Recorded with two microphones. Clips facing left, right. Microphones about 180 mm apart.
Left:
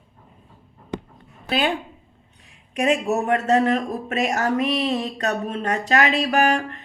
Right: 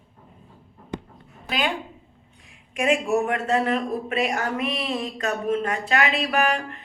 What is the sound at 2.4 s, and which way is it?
Speech, 40° left (ahead or behind).